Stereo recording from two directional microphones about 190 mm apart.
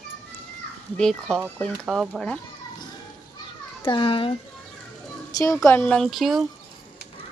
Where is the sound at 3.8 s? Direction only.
25° left (ahead or behind).